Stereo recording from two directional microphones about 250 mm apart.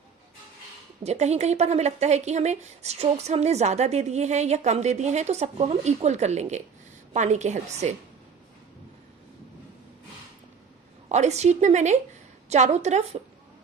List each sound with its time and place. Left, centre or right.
1.0 s speech: right
11.1 s speech: right